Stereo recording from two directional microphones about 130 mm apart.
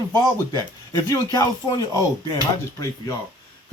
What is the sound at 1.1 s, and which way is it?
Speech, 30° left (ahead or behind).